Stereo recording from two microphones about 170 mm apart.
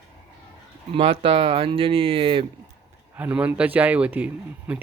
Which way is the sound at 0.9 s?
35° right (ahead or behind).